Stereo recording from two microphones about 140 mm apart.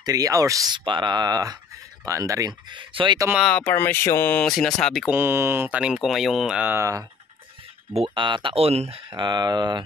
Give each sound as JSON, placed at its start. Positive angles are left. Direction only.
{"t": 0.0, "sound": "speech", "side_deg": -25}
{"t": 2.7, "sound": "speech", "side_deg": -35}
{"t": 3.3, "sound": "speech", "side_deg": 5}
{"t": 3.6, "sound": "speech", "side_deg": 15}
{"t": 5.1, "sound": "speech", "side_deg": -15}
{"t": 7.9, "sound": "speech", "side_deg": -40}